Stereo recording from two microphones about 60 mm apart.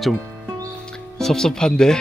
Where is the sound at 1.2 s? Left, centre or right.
Centre.